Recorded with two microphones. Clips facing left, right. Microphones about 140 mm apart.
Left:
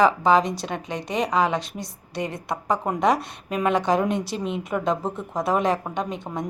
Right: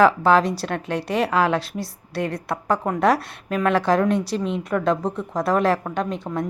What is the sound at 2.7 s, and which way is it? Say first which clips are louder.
Speech: right 2 dB; 15° left (ahead or behind).